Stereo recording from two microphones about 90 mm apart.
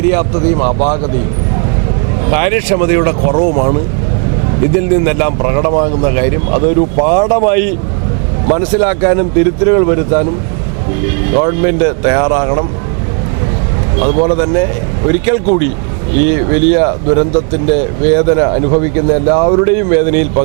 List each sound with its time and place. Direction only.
0.1 s speech: 20° right (ahead or behind)
2.2 s speech: 15° right (ahead or behind)
4.8 s speech: 20° right (ahead or behind)
11.3 s speech: 15° right (ahead or behind)
14.0 s speech: 20° right (ahead or behind)